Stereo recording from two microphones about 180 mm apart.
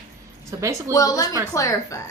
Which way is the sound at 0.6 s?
15° right (ahead or behind).